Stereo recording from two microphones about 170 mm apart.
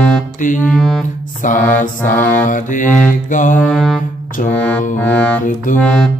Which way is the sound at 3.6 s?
Centre (ahead or behind).